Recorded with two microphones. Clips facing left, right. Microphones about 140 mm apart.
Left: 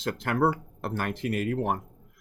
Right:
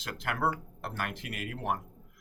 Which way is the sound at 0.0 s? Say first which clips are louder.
Left 7 dB; 35° left (ahead or behind).